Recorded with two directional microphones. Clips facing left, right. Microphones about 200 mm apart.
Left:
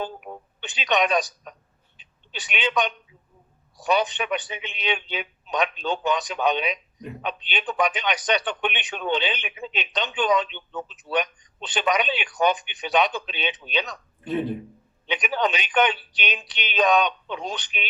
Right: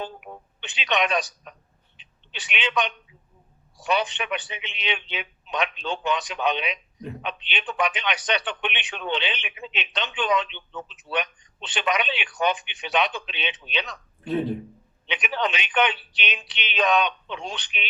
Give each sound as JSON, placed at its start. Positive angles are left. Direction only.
{"t": 0.7, "sound": "a man's voice", "side_deg": 40}
{"t": 14.3, "sound": "speech", "side_deg": 0}
{"t": 15.0, "sound": "a man's voice", "side_deg": 40}